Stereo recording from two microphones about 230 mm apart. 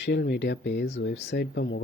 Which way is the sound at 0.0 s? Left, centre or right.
Left.